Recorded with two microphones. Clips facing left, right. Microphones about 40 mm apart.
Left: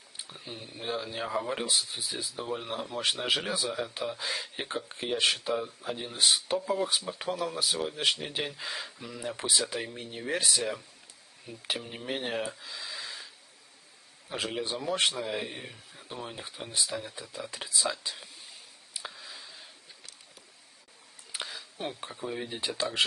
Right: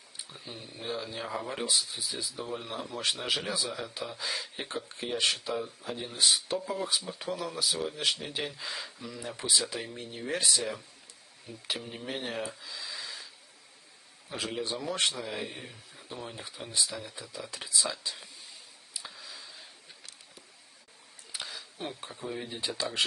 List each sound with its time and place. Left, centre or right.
0.3 s speech: centre
19.1 s a sound: centre
21.3 s speech: centre